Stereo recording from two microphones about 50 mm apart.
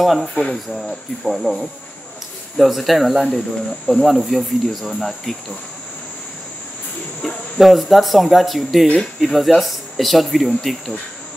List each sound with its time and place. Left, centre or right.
0.0 s speech: centre
0.3 s speech: centre
0.7 s speech: centre
7.2 s speech: centre